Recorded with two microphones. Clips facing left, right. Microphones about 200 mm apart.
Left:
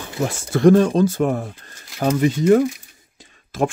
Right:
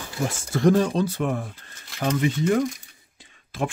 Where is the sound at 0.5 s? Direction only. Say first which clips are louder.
Left 6 dB; 60° left (ahead or behind); by 2.1 s 40° left (ahead or behind).